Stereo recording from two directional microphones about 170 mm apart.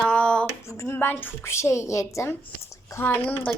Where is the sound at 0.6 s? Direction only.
15° left (ahead or behind).